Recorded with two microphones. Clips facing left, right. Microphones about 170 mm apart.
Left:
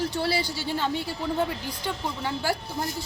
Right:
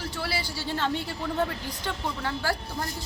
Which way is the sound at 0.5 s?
15° left (ahead or behind).